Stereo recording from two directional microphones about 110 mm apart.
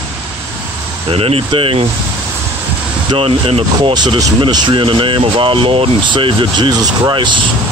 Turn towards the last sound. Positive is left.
turn(degrees=-45)  # may be behind; listen again after turning